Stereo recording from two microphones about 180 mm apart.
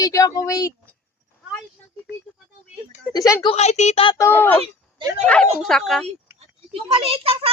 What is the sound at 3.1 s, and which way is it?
Speech, 20° left (ahead or behind).